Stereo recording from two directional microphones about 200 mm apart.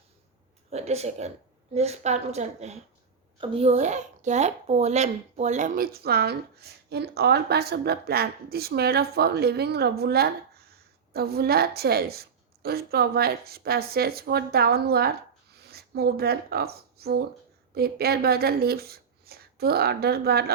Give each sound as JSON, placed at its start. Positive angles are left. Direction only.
{"t": 0.7, "sound": "a woman's voice", "side_deg": -35}